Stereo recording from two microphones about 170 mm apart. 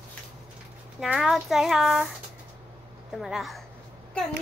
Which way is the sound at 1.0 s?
Centre (ahead or behind).